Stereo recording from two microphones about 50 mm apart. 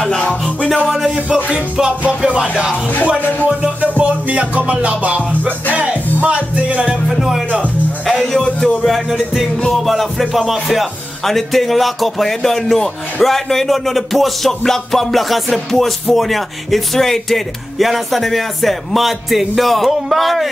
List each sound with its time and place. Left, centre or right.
0.0 s music: centre
0.8 s music: centre
1.1 s music: centre
2.7 s music: left
3.6 s music: right
7.1 s music: centre
8.0 s speech: centre
9.1 s music: centre